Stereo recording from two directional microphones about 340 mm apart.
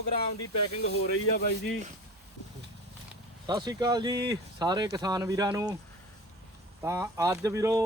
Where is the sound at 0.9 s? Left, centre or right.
Left.